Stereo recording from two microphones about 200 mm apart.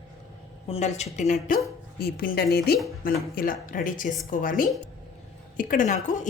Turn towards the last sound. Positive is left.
turn(degrees=40)  # may be behind; listen again after turning